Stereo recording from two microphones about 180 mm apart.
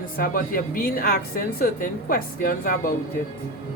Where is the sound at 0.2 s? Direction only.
50° left (ahead or behind).